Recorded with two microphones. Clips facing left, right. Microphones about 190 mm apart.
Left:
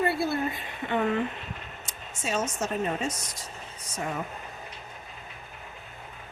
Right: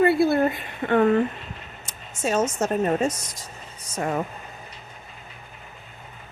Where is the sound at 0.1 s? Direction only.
60° right (ahead or behind).